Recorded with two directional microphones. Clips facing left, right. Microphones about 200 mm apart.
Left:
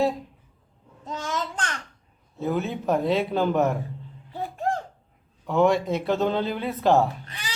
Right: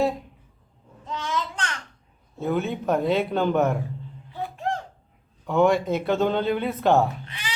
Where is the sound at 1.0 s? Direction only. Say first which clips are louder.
Right 1 dB; 45° left (ahead or behind).